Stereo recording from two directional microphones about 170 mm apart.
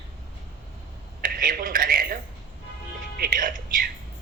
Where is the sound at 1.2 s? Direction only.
55° right (ahead or behind).